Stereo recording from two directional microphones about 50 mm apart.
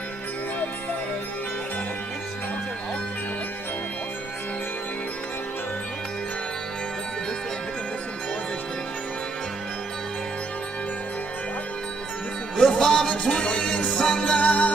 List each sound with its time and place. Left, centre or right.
12.5 s music: centre
14.3 s music: left